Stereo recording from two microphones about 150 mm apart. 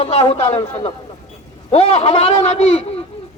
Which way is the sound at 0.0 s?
40° left (ahead or behind).